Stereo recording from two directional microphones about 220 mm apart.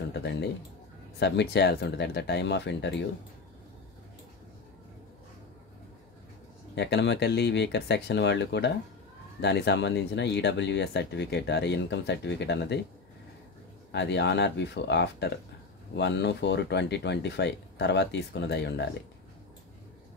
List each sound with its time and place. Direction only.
0.1 s a man's voice: 50° left (ahead or behind)
6.7 s speech: 50° left (ahead or behind)
13.9 s speech: 50° left (ahead or behind)